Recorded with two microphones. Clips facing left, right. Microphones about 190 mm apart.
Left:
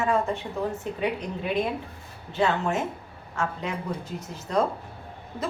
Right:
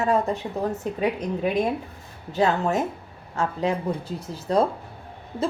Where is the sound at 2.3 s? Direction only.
40° right (ahead or behind).